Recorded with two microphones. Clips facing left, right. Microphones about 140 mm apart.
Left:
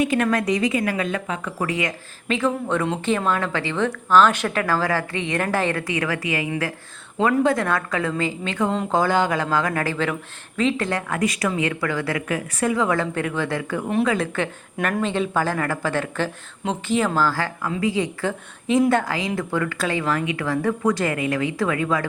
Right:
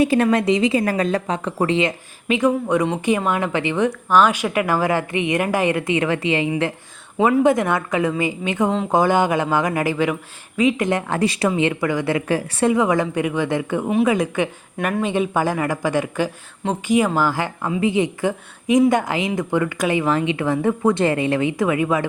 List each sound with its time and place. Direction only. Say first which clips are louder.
0.0 s speech: right 4 dB; 30° right (ahead or behind)
0.8 s a woman's voice: right 4 dB; 35° right (ahead or behind)
2.2 s speech: right 4 dB; 15° right (ahead or behind)